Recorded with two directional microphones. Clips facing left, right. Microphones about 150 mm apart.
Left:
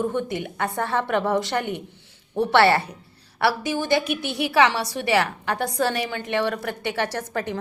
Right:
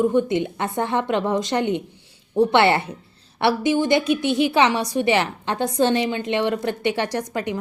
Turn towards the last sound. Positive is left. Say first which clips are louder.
# right 3 dB
turn(degrees=-15)  # may be behind; listen again after turning